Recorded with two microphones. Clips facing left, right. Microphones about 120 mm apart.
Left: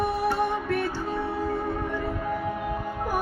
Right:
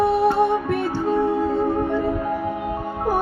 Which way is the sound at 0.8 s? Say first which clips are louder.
Right 8 dB; 55° right (ahead or behind).